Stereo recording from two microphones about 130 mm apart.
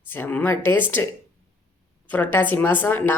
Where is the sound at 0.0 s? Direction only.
15° left (ahead or behind).